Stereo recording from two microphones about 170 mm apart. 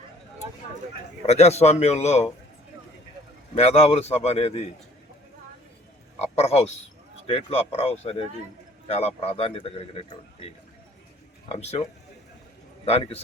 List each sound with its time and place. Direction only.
1.3 s speech: 40° left (ahead or behind)
3.5 s speech: 35° left (ahead or behind)
6.1 s speech: 40° left (ahead or behind)
11.5 s speech: 40° left (ahead or behind)
12.8 s a man's voice: 35° left (ahead or behind)